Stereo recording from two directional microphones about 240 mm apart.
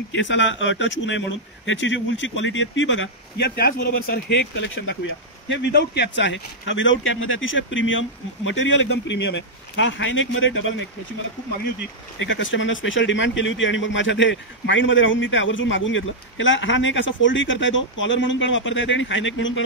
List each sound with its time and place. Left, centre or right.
0.1 s a man's voice: left
12.2 s a man's voice: left